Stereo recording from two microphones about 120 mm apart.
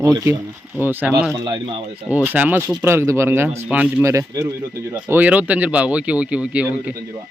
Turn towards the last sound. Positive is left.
turn(degrees=-10)  # may be behind; listen again after turning